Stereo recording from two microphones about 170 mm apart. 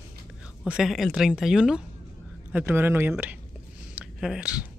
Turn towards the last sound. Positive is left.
turn(degrees=-5)  # may be behind; listen again after turning